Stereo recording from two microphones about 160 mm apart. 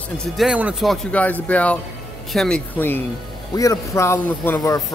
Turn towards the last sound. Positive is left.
turn(degrees=15)  # may be behind; listen again after turning